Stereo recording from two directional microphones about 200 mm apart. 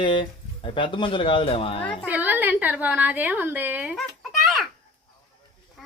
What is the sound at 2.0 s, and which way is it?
A woman's voice, 10° right (ahead or behind).